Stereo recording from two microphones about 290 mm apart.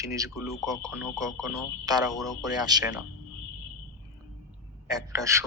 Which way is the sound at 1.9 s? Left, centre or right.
Centre.